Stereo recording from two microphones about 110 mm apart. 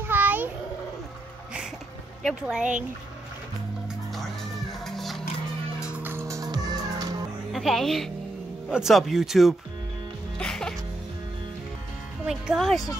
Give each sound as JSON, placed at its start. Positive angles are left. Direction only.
{"t": 0.0, "sound": "a sound", "side_deg": -15}
{"t": 2.2, "sound": "speech", "side_deg": -5}
{"t": 4.7, "sound": "music", "side_deg": 0}
{"t": 5.8, "sound": "music", "side_deg": -10}
{"t": 7.5, "sound": "speech", "side_deg": 0}
{"t": 10.3, "sound": "music", "side_deg": 5}
{"t": 12.3, "sound": "speech", "side_deg": -5}